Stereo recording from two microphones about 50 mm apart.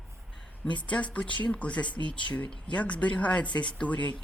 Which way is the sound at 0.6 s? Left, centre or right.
Left.